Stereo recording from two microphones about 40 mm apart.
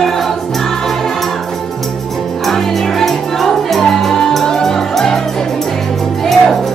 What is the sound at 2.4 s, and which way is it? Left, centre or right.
Music, centre.